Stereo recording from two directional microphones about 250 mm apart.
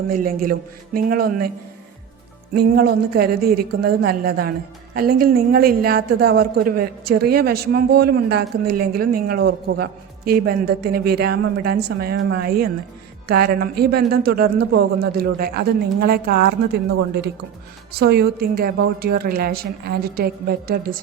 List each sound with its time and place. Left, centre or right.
0.1 s a woman's voice: right
2.6 s a woman's voice: right